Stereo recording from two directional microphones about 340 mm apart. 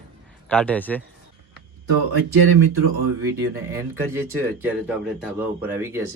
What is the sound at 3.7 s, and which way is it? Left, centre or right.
Speech, centre.